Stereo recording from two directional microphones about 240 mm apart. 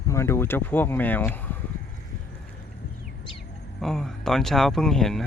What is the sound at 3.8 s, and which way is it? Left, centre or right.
Speech, centre.